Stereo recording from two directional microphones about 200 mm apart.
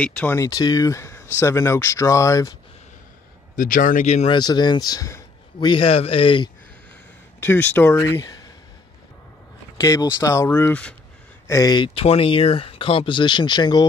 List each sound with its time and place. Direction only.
0.0 s speech: 5° left (ahead or behind)
3.5 s speech: 40° left (ahead or behind)
4.3 s speech: 20° left (ahead or behind)
7.3 s speech: 10° left (ahead or behind)
9.8 s speech: 20° left (ahead or behind)